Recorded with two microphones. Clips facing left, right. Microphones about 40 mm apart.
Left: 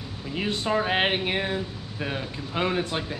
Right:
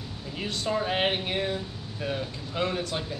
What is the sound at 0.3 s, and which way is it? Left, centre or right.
Speech, left.